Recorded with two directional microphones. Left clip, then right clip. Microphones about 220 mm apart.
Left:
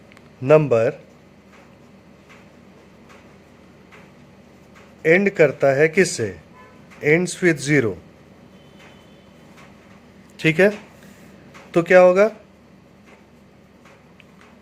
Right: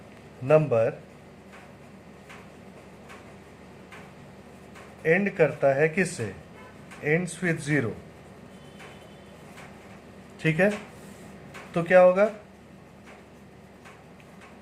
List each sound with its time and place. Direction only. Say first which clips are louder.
0.4 s speech: left 6 dB; 40° left (ahead or behind)
5.0 s speech: left 7 dB; 40° left (ahead or behind)
10.3 s speech: left 8 dB; 40° left (ahead or behind)
11.7 s speech: left 6 dB; 40° left (ahead or behind)